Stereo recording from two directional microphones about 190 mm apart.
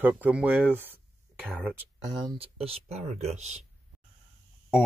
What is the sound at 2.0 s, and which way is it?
Speech, 25° right (ahead or behind).